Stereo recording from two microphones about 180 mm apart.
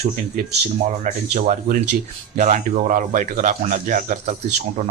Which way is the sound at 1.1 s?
45° right (ahead or behind).